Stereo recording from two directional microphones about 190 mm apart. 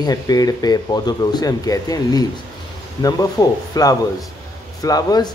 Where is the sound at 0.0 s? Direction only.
20° left (ahead or behind).